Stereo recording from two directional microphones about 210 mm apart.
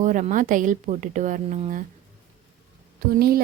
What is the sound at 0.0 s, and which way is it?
A woman's voice, 35° right (ahead or behind).